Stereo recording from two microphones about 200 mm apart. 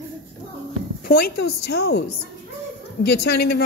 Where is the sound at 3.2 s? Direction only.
50° left (ahead or behind).